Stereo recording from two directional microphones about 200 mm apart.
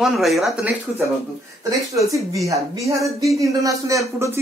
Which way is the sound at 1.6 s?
15° right (ahead or behind).